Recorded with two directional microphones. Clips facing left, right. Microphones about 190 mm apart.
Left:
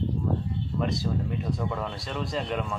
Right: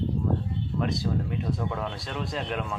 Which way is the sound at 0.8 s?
Centre (ahead or behind).